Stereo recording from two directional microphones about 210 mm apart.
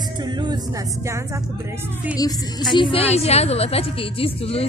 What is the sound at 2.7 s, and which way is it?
A woman's voice, 25° left (ahead or behind).